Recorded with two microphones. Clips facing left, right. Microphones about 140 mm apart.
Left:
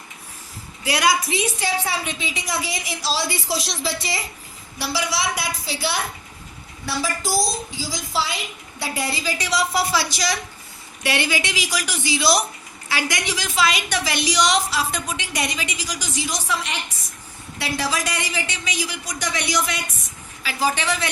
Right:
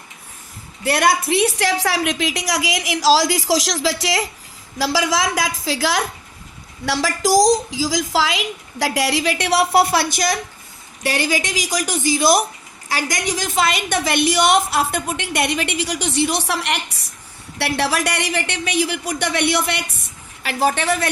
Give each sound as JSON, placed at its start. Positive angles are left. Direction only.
{"t": 0.9, "sound": "a woman's voice", "side_deg": -55}
{"t": 11.0, "sound": "a woman's voice", "side_deg": -40}